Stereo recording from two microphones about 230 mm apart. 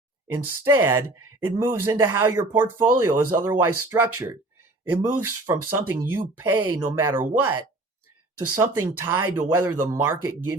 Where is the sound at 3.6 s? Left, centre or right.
Right.